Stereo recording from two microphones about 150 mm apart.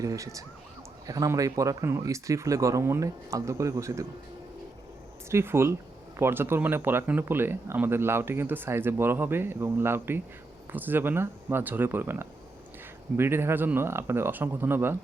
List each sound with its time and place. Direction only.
0.0 s speech: 20° right (ahead or behind)
5.3 s speech: 15° right (ahead or behind)